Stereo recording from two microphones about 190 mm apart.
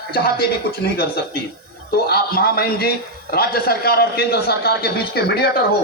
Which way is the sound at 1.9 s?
55° left (ahead or behind).